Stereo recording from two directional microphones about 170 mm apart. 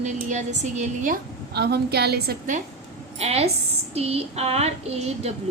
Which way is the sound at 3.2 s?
35° right (ahead or behind).